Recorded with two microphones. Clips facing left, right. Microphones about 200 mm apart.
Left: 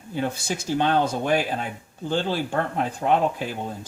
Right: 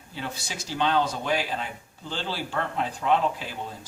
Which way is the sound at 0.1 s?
50° left (ahead or behind).